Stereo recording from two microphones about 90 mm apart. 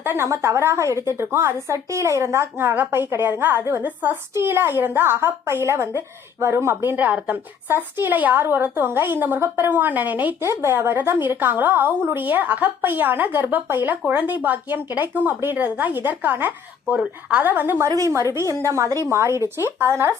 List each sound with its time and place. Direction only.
0.0 s a woman's voice: 25° right (ahead or behind)
6.9 s a woman's voice: 15° right (ahead or behind)
10.4 s a woman's voice: 30° right (ahead or behind)
17.0 s a woman's voice: 10° right (ahead or behind)
17.4 s a woman's voice: 20° right (ahead or behind)
17.8 s a woman's voice: 35° right (ahead or behind)